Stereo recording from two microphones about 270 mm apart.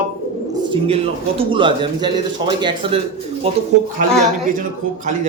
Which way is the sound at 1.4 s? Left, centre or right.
Centre.